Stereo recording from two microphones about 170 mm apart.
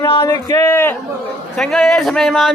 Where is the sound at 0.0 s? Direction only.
25° left (ahead or behind).